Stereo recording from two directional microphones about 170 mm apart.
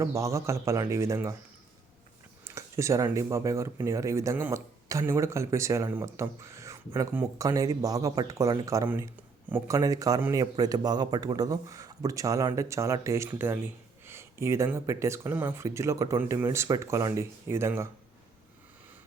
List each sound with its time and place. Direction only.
0.0 s speech: 15° right (ahead or behind)
2.4 s speech: 15° right (ahead or behind)